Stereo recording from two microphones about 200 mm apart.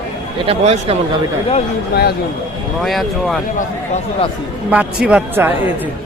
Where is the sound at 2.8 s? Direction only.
Centre (ahead or behind).